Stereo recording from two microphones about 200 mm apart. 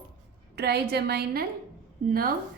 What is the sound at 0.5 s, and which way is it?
Speech, 55° right (ahead or behind).